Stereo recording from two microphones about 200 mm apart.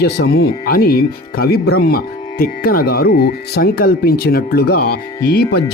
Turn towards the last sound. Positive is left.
turn(degrees=50)  # may be behind; listen again after turning